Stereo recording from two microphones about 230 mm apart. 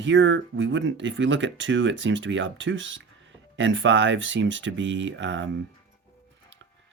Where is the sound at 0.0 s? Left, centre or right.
Right.